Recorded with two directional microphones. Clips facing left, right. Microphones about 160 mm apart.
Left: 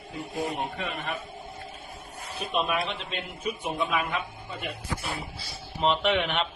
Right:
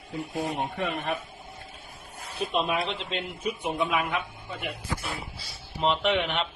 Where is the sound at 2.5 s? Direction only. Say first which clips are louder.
Even; 20° right (ahead or behind).